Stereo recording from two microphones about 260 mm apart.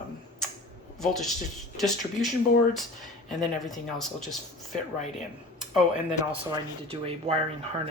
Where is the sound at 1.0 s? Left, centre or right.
Centre.